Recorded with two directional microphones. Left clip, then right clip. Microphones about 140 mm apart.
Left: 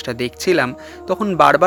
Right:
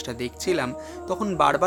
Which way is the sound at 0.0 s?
45° left (ahead or behind).